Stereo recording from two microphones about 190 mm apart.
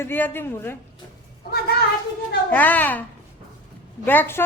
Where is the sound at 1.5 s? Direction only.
55° left (ahead or behind).